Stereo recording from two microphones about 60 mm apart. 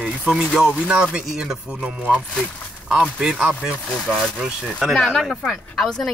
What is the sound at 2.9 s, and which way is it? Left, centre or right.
Chopping, centre.